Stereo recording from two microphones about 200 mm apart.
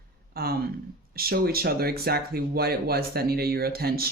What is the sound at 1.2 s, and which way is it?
Speech, 50° right (ahead or behind).